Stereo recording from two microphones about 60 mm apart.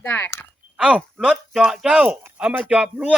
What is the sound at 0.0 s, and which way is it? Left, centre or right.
Speech, left.